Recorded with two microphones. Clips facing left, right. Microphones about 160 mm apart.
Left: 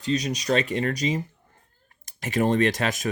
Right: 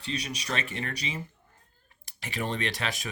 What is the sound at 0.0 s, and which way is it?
Speech, 40° left (ahead or behind).